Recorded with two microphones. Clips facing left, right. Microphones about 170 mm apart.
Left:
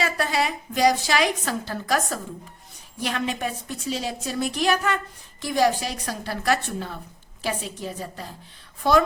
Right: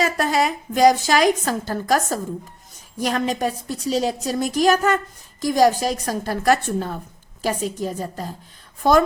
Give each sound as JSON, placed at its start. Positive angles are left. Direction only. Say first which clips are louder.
{"t": 0.0, "sound": "a woman's voice", "louder": "right 4 dB", "side_deg": -45}